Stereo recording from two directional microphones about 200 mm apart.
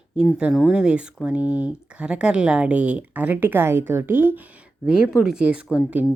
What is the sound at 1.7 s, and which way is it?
Speech, 5° right (ahead or behind).